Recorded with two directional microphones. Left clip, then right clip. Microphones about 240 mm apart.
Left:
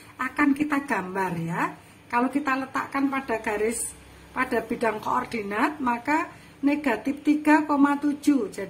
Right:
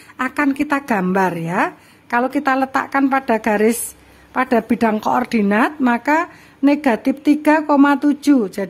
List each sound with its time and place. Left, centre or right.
0.2 s speech: right